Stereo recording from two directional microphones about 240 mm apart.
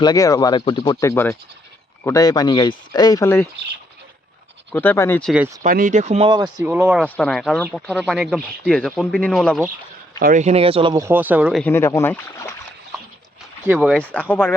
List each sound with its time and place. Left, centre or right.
0.0 s speech: centre
4.7 s speech: centre
5.6 s speech: right
6.6 s speech: centre
7.0 s speech: centre
10.2 s speech: right
10.9 s speech: centre
11.6 s speech: centre
13.7 s speech: centre